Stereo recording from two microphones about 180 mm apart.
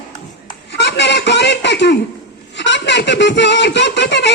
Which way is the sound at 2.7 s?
75° left (ahead or behind).